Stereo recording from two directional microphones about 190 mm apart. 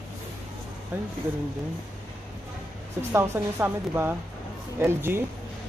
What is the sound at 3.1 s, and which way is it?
Speech, 15° right (ahead or behind).